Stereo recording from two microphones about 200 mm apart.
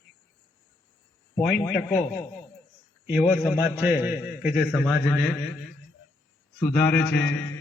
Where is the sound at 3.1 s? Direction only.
10° right (ahead or behind).